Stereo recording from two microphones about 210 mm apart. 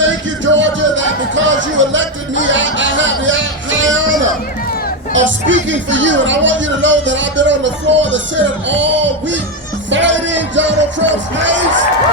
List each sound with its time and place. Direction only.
0.0 s music: 60° right (ahead or behind)
5.1 s speech: 60° right (ahead or behind)
9.9 s music: 60° right (ahead or behind)